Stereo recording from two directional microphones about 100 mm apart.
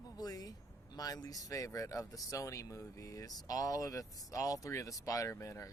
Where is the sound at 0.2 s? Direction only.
40° left (ahead or behind).